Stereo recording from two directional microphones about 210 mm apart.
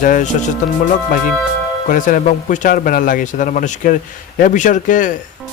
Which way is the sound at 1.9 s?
40° left (ahead or behind).